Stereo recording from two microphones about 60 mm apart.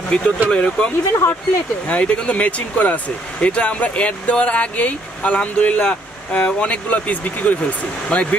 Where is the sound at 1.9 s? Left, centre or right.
Left.